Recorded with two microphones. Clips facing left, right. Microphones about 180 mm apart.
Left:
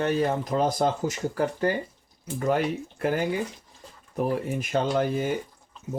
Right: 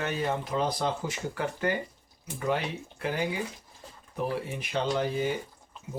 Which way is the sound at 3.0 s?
50° left (ahead or behind).